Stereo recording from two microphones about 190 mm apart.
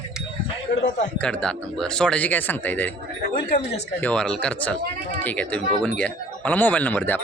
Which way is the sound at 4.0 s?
5° left (ahead or behind).